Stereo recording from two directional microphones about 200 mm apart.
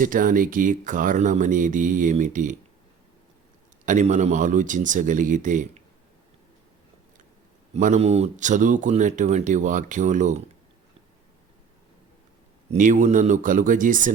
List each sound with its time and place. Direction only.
0.0 s speech: 45° right (ahead or behind)
3.8 s speech: 40° right (ahead or behind)
7.8 s speech: 35° right (ahead or behind)
12.7 s speech: 40° right (ahead or behind)